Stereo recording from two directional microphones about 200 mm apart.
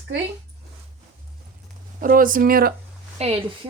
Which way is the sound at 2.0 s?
45° right (ahead or behind).